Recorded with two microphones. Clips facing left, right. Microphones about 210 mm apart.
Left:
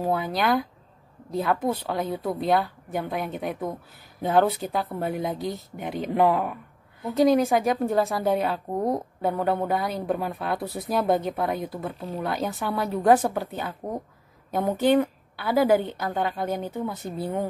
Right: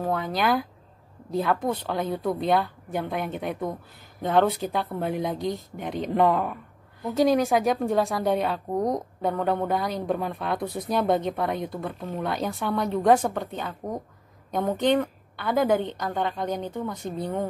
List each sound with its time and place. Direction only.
0.0 s a woman's voice: 5° left (ahead or behind)